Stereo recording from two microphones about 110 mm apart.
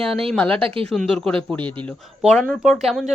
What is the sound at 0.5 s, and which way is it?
Speech, 55° right (ahead or behind).